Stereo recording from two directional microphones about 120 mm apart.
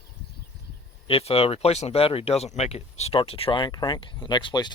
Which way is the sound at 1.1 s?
50° left (ahead or behind).